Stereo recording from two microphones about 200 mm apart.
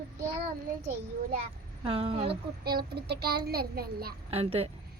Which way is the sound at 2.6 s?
50° right (ahead or behind).